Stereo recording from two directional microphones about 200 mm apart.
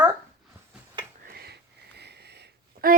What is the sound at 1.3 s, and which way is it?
Sniff, 50° right (ahead or behind).